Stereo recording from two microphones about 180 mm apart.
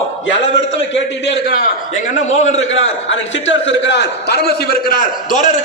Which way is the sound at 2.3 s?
40° left (ahead or behind).